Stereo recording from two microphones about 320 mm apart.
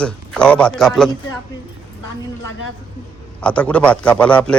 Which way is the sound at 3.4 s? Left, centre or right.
Centre.